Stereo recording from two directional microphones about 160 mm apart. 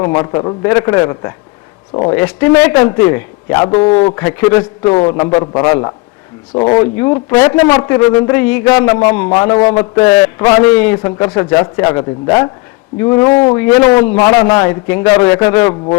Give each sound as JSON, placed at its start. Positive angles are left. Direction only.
{"t": 0.0, "sound": "a man's voice", "side_deg": 25}
{"t": 1.9, "sound": "speech", "side_deg": 30}
{"t": 2.1, "sound": "a man's voice", "side_deg": 15}
{"t": 6.7, "sound": "a man's voice", "side_deg": 20}
{"t": 9.4, "sound": "a man's voice", "side_deg": 25}
{"t": 9.7, "sound": "a man's voice", "side_deg": 15}